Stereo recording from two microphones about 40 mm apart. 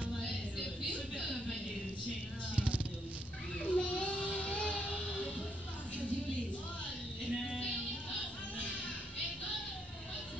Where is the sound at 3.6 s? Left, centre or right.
Left.